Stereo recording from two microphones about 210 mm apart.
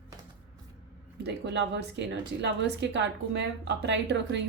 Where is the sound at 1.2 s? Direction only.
55° right (ahead or behind).